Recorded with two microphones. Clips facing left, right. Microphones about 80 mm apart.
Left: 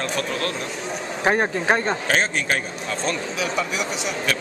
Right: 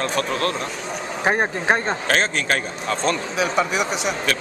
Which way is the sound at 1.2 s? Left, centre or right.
Centre.